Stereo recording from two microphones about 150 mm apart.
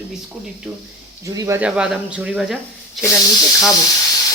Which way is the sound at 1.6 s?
5° right (ahead or behind).